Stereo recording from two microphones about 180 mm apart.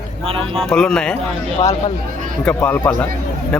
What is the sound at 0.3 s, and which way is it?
Speech, 30° right (ahead or behind).